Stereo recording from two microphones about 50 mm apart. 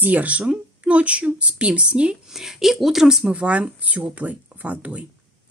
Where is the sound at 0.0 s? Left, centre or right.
Right.